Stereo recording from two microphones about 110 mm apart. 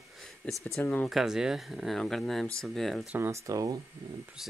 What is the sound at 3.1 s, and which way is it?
Speech, 25° right (ahead or behind).